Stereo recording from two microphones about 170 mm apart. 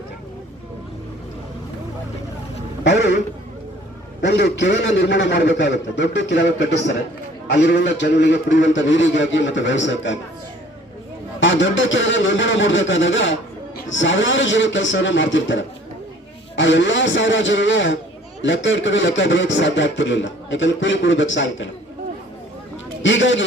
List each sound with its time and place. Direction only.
2.9 s a sound: 90° left
4.2 s a man's voice: 90° left
11.3 s a man's voice: 90° left
23.0 s a man's voice: 90° left